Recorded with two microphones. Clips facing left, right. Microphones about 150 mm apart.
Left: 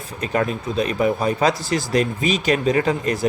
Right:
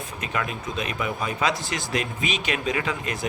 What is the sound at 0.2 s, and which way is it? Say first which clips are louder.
Speech: left 8 dB; 35° left (ahead or behind).